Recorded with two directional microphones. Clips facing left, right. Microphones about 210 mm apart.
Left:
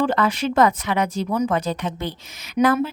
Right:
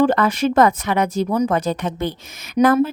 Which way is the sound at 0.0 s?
45° right (ahead or behind).